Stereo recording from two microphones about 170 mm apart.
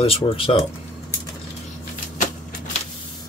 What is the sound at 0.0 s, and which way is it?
Speech, 35° left (ahead or behind).